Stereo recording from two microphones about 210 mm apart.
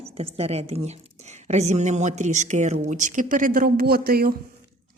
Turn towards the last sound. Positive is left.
turn(degrees=-45)  # may be behind; listen again after turning